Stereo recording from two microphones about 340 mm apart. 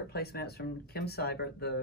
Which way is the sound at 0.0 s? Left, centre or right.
Left.